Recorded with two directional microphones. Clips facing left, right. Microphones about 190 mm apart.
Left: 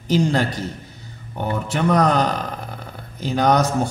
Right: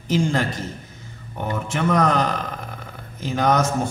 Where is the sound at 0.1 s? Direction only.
35° left (ahead or behind).